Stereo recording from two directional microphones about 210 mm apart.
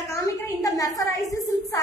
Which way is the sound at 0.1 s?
15° left (ahead or behind).